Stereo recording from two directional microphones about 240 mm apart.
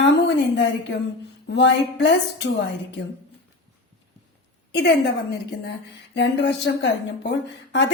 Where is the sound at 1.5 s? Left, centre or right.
Left.